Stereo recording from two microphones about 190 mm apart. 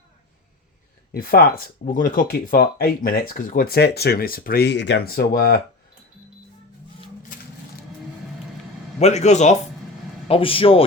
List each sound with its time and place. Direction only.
1.1 s speech: 50° left (ahead or behind)
9.0 s a man's voice: 35° left (ahead or behind)